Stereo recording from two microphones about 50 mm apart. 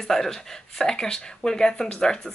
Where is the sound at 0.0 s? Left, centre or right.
Centre.